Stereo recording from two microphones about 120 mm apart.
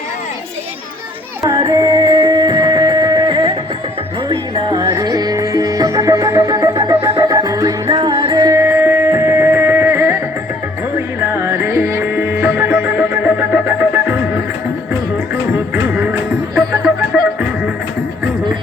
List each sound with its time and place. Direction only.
1.5 s music: 35° right (ahead or behind); by 14.4 s 15° right (ahead or behind)
15.5 s music: 15° right (ahead or behind)